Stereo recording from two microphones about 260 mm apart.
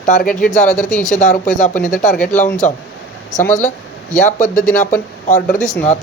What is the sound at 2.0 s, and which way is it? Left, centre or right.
Speech, left.